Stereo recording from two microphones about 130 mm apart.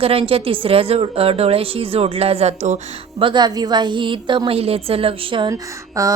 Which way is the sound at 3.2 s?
35° right (ahead or behind).